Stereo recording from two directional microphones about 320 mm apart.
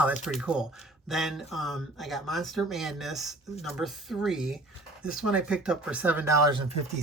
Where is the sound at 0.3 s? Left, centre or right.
Centre.